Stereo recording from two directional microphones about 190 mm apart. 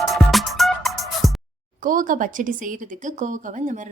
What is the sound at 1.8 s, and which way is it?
A woman's voice, 45° right (ahead or behind).